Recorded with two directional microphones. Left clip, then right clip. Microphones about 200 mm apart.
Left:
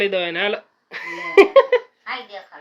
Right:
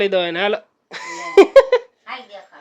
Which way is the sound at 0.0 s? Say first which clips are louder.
Right 2 dB; 25° right (ahead or behind).